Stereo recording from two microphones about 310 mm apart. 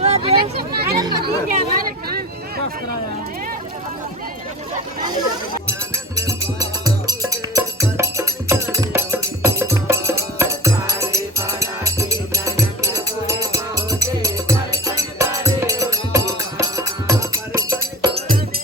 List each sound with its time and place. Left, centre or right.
0.0 s vehicle: centre
1.2 s speech: right
6.1 s music: centre